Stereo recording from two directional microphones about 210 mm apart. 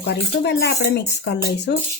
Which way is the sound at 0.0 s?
55° left (ahead or behind).